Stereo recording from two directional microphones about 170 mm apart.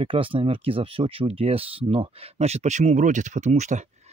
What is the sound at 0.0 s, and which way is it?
Speech, 30° right (ahead or behind).